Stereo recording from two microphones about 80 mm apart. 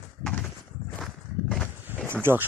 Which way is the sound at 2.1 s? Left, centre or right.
Right.